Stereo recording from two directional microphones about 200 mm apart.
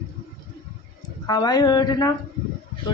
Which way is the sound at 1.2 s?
20° left (ahead or behind).